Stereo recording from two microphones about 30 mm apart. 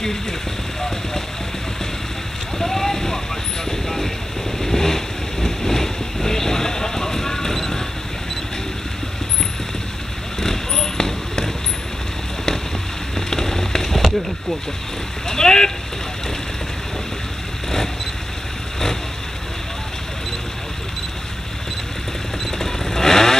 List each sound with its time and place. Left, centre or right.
2.6 s a sound: centre
4.6 s vehicle: centre
10.4 s basketball bounce: centre
13.3 s a sound: centre
15.2 s boat: left
22.6 s vehicle: centre